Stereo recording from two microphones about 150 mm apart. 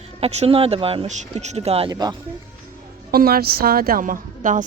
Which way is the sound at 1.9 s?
25° right (ahead or behind).